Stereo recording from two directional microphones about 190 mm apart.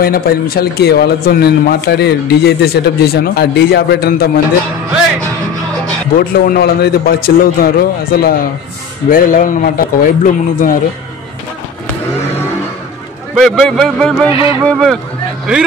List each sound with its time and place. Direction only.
0.0 s a man's voice: 50° left (ahead or behind)
6.3 s a man's voice: 50° left (ahead or behind)
13.3 s a man's voice: centre (ahead or behind)